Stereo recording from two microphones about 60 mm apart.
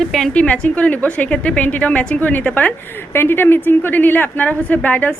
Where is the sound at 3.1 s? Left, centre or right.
Left.